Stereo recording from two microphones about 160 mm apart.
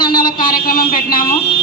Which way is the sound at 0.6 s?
65° left (ahead or behind).